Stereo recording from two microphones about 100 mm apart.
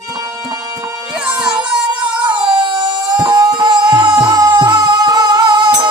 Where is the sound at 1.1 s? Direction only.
10° right (ahead or behind).